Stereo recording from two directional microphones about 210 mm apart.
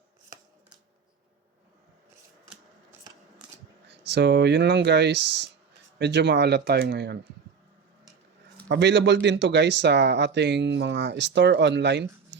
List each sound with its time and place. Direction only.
3.8 s speech: 55° right (ahead or behind)
8.6 s speech: 55° right (ahead or behind)